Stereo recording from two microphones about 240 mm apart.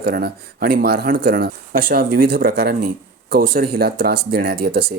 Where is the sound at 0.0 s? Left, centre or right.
Right.